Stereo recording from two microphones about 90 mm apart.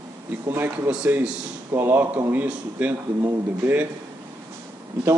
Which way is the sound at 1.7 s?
25° right (ahead or behind).